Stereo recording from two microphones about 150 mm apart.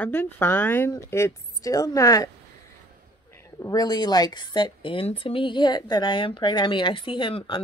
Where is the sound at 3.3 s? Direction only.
20° left (ahead or behind).